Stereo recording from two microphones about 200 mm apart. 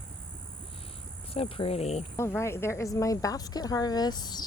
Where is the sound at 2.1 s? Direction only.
15° left (ahead or behind).